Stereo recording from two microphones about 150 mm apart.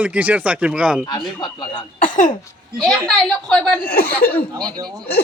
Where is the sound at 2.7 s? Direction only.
Centre (ahead or behind).